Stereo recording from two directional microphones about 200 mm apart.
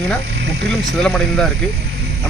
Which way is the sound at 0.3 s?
60° right (ahead or behind).